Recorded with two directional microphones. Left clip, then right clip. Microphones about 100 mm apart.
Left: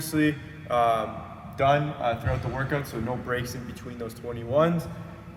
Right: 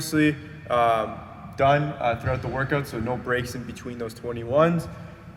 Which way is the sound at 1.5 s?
35° right (ahead or behind).